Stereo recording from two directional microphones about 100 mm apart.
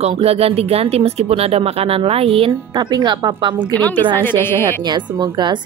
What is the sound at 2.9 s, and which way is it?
Speech, 45° right (ahead or behind).